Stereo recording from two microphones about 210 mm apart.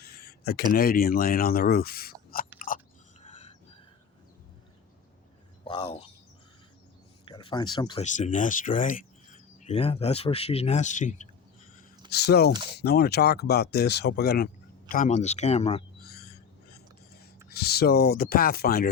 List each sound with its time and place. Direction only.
0.0 s a sound: 50° left (ahead or behind)
0.7 s speech: 45° left (ahead or behind)
2.6 s chewing: 40° left (ahead or behind)
3.2 s a sound: 35° left (ahead or behind)
5.6 s speech: 25° left (ahead or behind)
7.3 s speech: 20° left (ahead or behind)
8.0 s speech: 35° left (ahead or behind)
12.1 s speech: 50° left (ahead or behind); by 15.8 s 30° left (ahead or behind)
16.0 s a sound: 50° left (ahead or behind)
17.5 s speech: 50° left (ahead or behind)